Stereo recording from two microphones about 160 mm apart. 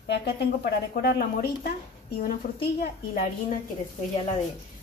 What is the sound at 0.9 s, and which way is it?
A woman's voice, 70° left (ahead or behind).